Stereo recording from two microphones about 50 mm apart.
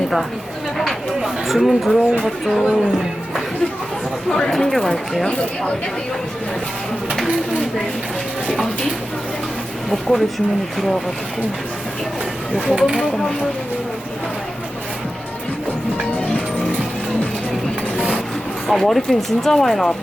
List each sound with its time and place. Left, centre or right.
1.2 s speech: centre
4.3 s speech: centre
5.3 s speech: left
9.9 s speech: centre
12.5 s speech: right
12.8 s speech: centre
18.7 s speech: centre